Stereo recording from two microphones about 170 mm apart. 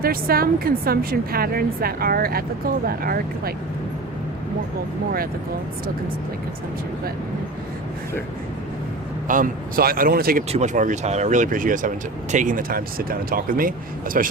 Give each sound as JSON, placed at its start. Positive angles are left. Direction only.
{"t": 0.0, "sound": "a woman's voice", "side_deg": -60}
{"t": 9.2, "sound": "a woman's voice", "side_deg": -50}
{"t": 10.5, "sound": "speech", "side_deg": -45}